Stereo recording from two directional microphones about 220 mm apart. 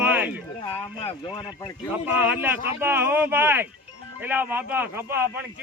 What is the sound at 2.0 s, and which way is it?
A man's voice, 10° right (ahead or behind).